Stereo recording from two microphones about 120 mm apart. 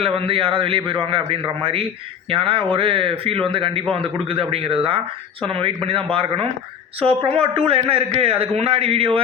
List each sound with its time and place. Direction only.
0.0 s a man's voice: 50° right (ahead or behind)